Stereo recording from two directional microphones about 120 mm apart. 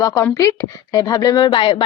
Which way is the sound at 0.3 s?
25° left (ahead or behind).